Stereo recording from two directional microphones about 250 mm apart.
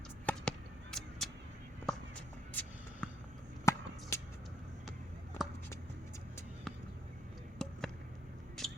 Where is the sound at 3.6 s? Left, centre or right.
Centre.